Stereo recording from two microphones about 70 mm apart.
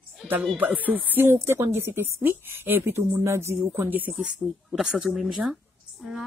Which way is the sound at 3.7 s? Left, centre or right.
Right.